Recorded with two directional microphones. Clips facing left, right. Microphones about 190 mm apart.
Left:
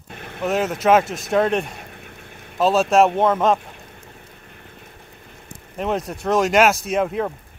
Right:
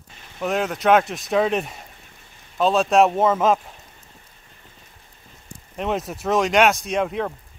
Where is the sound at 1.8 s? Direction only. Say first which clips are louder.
Left 7 dB; 65° left (ahead or behind).